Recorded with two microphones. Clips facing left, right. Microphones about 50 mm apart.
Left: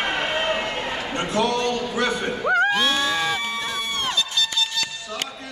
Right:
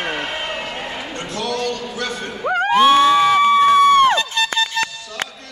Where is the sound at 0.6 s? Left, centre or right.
Centre.